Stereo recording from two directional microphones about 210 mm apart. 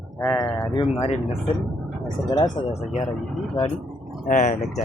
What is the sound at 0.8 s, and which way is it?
Speech, 30° left (ahead or behind).